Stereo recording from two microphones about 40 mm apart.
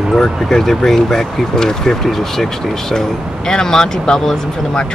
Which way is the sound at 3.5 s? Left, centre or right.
Centre.